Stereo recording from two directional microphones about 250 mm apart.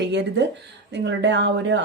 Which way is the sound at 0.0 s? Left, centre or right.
Right.